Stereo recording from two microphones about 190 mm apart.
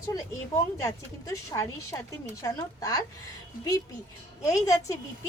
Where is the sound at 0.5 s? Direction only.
15° left (ahead or behind).